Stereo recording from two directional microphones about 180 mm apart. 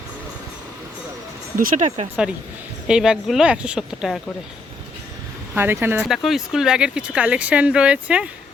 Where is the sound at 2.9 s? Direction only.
5° right (ahead or behind).